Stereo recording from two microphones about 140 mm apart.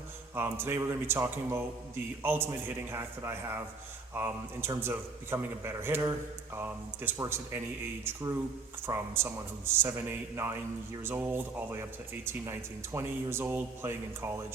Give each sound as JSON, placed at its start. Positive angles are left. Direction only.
{"t": 0.3, "sound": "a man's voice", "side_deg": -15}